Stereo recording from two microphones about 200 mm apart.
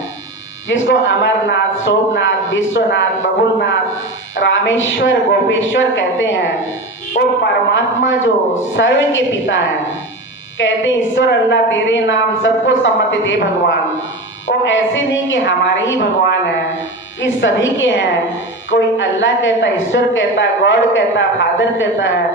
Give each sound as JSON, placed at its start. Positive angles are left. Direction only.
{"t": 0.7, "sound": "a man's voice", "side_deg": 70}
{"t": 7.1, "sound": "speech", "side_deg": 45}
{"t": 7.7, "sound": "a man's voice", "side_deg": 70}
{"t": 10.6, "sound": "a man's voice", "side_deg": 70}